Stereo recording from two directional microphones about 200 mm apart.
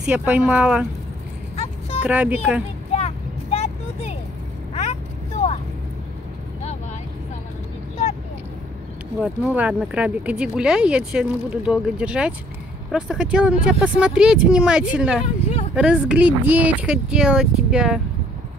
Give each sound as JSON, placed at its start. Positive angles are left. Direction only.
{"t": 0.0, "sound": "speech", "side_deg": -5}
{"t": 2.0, "sound": "speech", "side_deg": -10}
{"t": 3.5, "sound": "vehicle", "side_deg": 30}
{"t": 9.2, "sound": "speech", "side_deg": -5}